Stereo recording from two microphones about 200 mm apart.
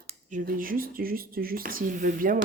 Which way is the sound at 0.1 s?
40° right (ahead or behind).